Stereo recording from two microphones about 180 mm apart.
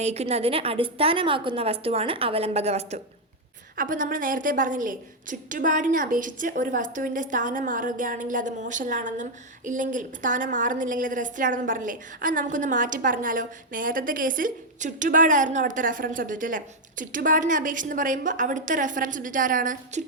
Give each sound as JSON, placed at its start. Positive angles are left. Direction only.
{"t": 0.0, "sound": "a woman's voice", "side_deg": -35}
{"t": 3.8, "sound": "a woman's voice", "side_deg": -50}